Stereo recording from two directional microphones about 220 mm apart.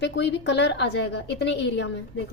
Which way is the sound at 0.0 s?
50° left (ahead or behind).